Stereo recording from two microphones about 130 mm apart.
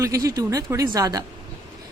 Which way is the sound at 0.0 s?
25° right (ahead or behind).